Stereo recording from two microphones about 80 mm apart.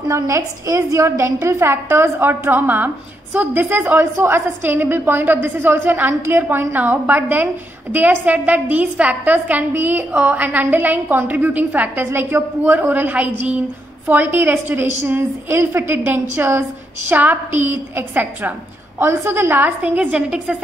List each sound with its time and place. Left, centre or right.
0.1 s a woman's voice: right; by 20.5 s centre